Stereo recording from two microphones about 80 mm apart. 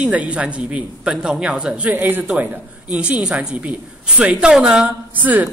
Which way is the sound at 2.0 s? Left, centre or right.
Right.